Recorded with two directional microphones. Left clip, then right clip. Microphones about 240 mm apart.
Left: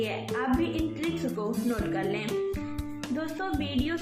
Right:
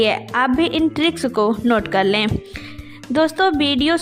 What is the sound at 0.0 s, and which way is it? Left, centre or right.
A woman's voice, right.